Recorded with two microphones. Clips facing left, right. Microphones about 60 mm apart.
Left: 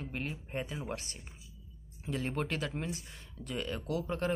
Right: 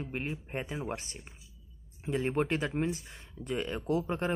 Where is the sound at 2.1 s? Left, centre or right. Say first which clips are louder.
Right 5 dB; right.